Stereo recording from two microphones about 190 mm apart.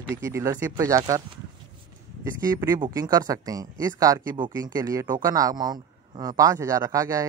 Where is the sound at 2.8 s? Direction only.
20° right (ahead or behind).